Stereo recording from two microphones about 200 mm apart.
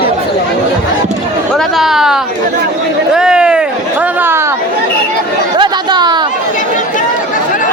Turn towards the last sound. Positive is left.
turn(degrees=-20)  # may be behind; listen again after turning